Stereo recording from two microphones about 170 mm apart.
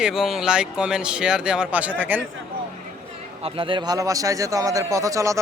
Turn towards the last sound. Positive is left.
turn(degrees=-20)  # may be behind; listen again after turning